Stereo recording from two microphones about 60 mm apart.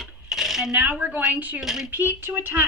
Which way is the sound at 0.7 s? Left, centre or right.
Right.